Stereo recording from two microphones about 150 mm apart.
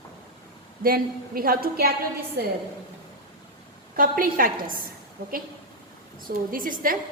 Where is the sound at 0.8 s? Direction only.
75° right (ahead or behind).